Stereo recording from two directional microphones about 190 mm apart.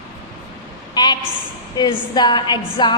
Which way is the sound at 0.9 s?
20° left (ahead or behind).